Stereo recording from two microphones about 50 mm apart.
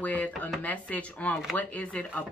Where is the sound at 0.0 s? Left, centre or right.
Left.